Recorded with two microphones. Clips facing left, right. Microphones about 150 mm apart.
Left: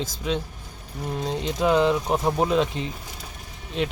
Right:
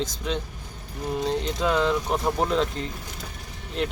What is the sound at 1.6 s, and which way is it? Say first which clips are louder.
Speech: left 5 dB; 15° left (ahead or behind).